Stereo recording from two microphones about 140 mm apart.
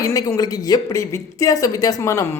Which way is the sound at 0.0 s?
25° left (ahead or behind).